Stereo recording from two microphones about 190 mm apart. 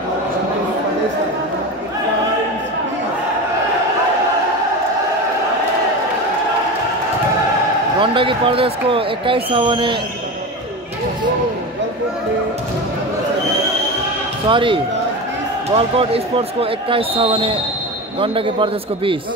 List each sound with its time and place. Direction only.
8.0 s speech: 25° right (ahead or behind)
14.5 s speech: 25° right (ahead or behind)